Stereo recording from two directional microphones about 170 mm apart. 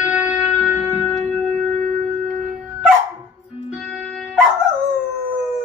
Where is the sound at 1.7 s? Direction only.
40° right (ahead or behind).